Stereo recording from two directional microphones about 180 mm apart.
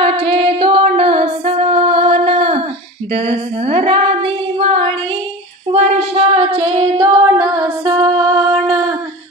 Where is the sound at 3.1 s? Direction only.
35° right (ahead or behind).